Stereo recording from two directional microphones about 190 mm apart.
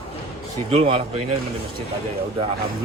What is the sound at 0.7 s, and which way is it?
Speech, 30° right (ahead or behind).